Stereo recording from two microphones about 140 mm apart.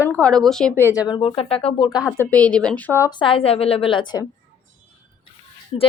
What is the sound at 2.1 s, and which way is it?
Speech, 10° left (ahead or behind).